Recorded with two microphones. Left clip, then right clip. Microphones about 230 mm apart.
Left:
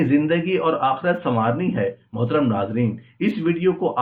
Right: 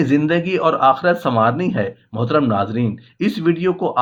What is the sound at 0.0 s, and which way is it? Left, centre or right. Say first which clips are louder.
Speech: right 2 dB; right.